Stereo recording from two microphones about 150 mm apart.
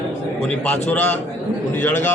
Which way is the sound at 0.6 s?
10° left (ahead or behind).